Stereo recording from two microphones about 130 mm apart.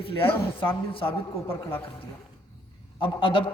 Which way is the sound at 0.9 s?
45° left (ahead or behind).